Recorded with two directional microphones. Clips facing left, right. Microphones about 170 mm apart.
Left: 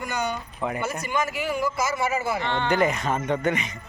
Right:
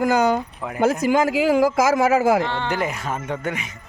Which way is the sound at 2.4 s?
5° right (ahead or behind).